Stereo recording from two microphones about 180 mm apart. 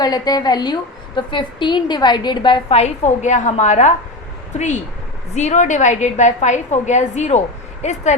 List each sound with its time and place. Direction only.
0.0 s a woman's voice: 20° left (ahead or behind); by 8.1 s 40° left (ahead or behind)